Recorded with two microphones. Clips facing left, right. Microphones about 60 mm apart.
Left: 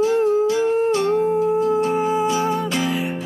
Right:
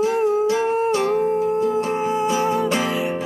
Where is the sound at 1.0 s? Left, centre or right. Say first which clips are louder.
Left 1 dB; centre.